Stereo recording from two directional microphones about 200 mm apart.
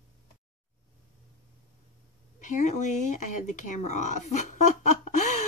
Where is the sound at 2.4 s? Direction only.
35° left (ahead or behind).